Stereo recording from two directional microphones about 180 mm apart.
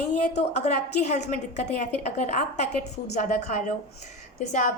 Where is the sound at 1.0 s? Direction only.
40° left (ahead or behind).